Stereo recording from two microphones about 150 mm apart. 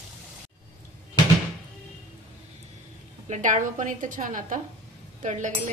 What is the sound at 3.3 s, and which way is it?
A woman's voice, 55° right (ahead or behind).